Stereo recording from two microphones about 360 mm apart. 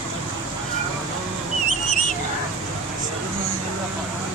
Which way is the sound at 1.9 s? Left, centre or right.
Left.